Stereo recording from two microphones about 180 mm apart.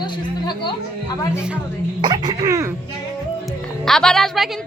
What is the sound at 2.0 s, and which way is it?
Speech, 25° right (ahead or behind).